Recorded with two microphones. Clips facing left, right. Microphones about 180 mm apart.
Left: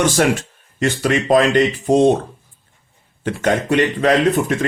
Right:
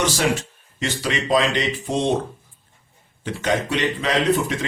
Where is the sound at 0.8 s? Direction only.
50° left (ahead or behind).